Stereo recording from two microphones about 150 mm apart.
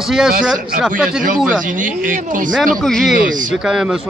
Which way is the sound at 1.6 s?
60° right (ahead or behind).